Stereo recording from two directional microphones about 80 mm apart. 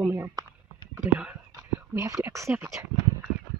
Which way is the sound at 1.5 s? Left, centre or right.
Right.